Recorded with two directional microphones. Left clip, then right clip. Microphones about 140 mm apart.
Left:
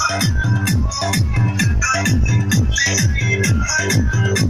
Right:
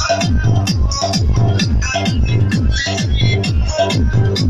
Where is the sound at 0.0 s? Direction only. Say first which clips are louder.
Right 2 dB; 25° left (ahead or behind).